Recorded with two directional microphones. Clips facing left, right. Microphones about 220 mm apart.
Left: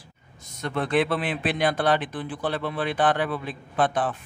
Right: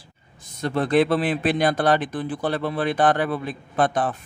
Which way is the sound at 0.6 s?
35° right (ahead or behind).